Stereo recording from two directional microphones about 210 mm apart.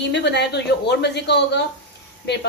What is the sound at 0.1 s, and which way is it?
A woman's voice, 55° left (ahead or behind).